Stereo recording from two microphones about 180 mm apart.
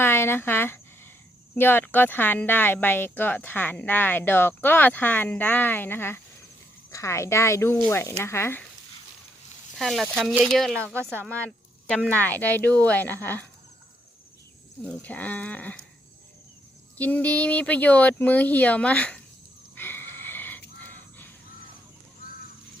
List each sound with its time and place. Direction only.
0.0 s speech: 10° left (ahead or behind)
9.7 s speech: centre (ahead or behind)
12.2 s speech: 10° left (ahead or behind)
14.8 s speech: 10° left (ahead or behind)
17.0 s speech: 10° left (ahead or behind)
19.7 s a sound: 10° left (ahead or behind)